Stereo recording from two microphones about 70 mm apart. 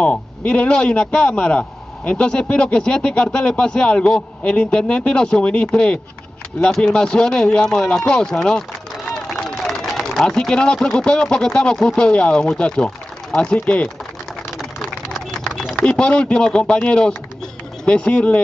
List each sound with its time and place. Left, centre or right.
0.0 s a man's voice: centre
9.8 s a man's voice: centre
14.8 s a sound: centre
16.0 s a man's voice: centre